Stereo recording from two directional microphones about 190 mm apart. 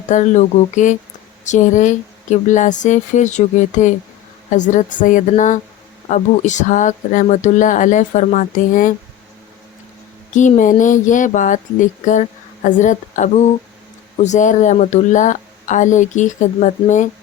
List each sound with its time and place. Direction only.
0.1 s speech: 40° left (ahead or behind)
10.3 s speech: 40° left (ahead or behind)